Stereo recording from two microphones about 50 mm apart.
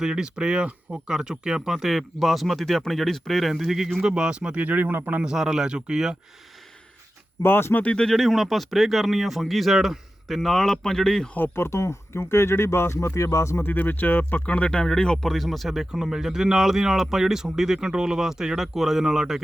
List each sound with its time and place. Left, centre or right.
0.0 s speech: centre
4.1 s speech: centre
4.6 s speech: right
5.2 s speech: centre
7.4 s speech: left
8.1 s speech: centre
11.3 s speech: left
13.6 s speech: left
14.7 s speech: centre
15.3 s speech: centre